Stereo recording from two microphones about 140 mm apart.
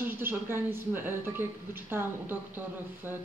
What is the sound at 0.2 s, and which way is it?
Speech, 15° right (ahead or behind).